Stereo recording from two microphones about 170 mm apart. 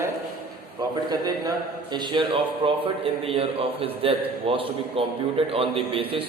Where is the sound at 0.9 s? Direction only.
25° right (ahead or behind).